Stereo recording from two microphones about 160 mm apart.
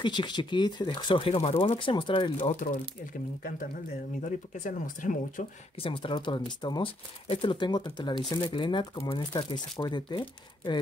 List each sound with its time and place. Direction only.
0.0 s speech: 30° left (ahead or behind)
2.4 s speech: 60° left (ahead or behind)
4.2 s speech: 55° left (ahead or behind)
5.8 s speech: 35° left (ahead or behind)